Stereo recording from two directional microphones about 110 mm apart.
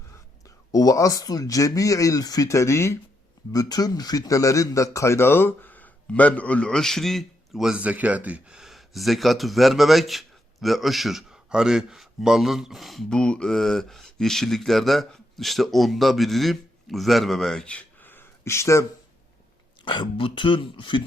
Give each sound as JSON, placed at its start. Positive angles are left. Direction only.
{"t": 0.7, "sound": "speech", "side_deg": 35}
{"t": 3.5, "sound": "a man's voice", "side_deg": 35}
{"t": 19.8, "sound": "speech", "side_deg": 45}